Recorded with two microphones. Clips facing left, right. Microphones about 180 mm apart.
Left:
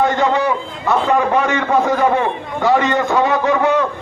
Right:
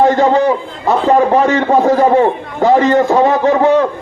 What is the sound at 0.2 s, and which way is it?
A man's voice, 35° right (ahead or behind).